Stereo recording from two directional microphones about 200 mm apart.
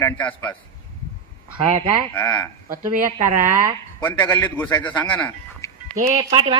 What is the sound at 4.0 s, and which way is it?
A man's voice, 10° left (ahead or behind).